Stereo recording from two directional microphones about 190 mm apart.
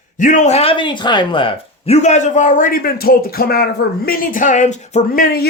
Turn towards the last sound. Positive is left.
turn(degrees=55)  # may be behind; listen again after turning